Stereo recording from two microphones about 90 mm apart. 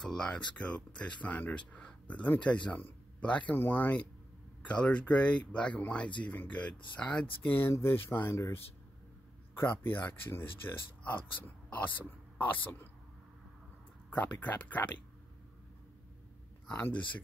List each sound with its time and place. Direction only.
0.0 s speech: 5° left (ahead or behind)
14.1 s speech: 20° left (ahead or behind)
16.6 s speech: 15° left (ahead or behind)